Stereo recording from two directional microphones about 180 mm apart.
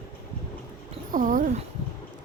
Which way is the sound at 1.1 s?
50° right (ahead or behind).